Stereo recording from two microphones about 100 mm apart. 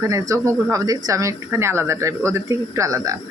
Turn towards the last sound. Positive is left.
turn(degrees=-35)  # may be behind; listen again after turning